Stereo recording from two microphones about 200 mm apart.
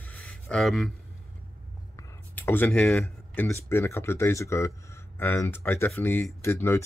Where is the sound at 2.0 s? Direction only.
10° left (ahead or behind).